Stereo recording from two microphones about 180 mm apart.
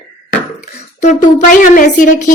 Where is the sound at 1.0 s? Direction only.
45° left (ahead or behind).